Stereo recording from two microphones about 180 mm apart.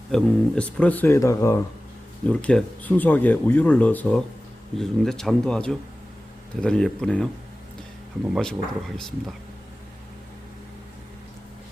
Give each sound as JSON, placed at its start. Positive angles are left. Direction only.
{"t": 0.1, "sound": "speech", "side_deg": 5}
{"t": 8.3, "sound": "speech", "side_deg": 5}